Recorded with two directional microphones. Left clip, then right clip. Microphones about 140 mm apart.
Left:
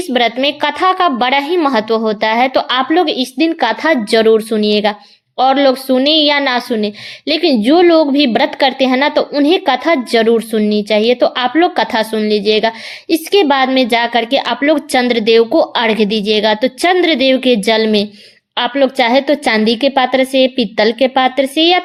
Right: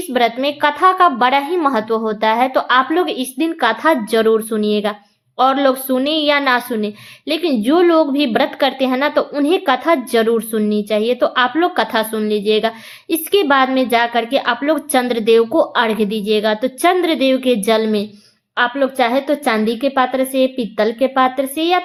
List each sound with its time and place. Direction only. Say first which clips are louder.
0.1 s a woman's voice: left 2 dB; 35° left (ahead or behind)